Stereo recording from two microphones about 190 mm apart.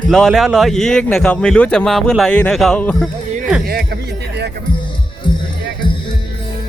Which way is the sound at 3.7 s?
55° right (ahead or behind).